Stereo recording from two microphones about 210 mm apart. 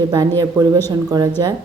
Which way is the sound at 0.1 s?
15° right (ahead or behind).